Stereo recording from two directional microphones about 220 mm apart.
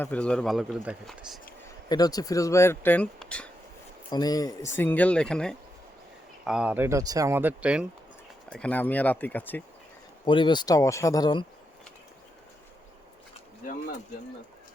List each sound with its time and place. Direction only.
0.0 s speech: 5° left (ahead or behind)
1.9 s speech: 15° left (ahead or behind)
4.1 s speech: 15° left (ahead or behind); by 7.9 s 5° right (ahead or behind)
8.4 s speech: 5° left (ahead or behind)
10.2 s speech: 20° left (ahead or behind)
13.7 s speech: 40° left (ahead or behind)